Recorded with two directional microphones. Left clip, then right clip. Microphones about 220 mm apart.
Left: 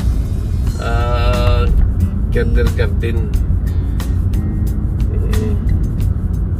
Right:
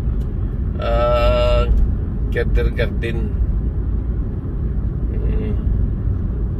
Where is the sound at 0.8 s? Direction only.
20° right (ahead or behind).